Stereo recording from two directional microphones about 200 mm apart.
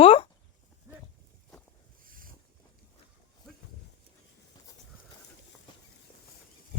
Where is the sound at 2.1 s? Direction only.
45° right (ahead or behind).